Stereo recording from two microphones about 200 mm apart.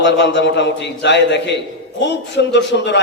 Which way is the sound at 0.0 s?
60° left (ahead or behind).